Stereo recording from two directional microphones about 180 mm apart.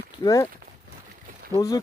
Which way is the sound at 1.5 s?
20° left (ahead or behind).